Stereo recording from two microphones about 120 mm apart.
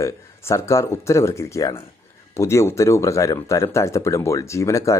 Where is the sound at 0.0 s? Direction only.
25° left (ahead or behind).